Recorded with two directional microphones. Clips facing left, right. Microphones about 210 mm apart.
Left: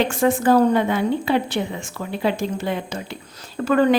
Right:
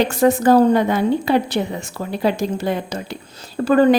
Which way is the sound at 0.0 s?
40° right (ahead or behind).